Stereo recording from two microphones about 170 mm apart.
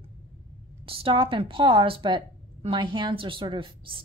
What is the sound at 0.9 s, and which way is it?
A woman's voice, 30° right (ahead or behind).